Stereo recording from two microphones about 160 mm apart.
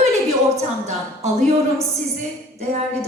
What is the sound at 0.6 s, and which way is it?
A woman's voice, 45° right (ahead or behind).